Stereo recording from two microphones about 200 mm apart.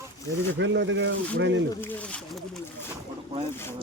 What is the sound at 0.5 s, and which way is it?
Speech, 65° right (ahead or behind).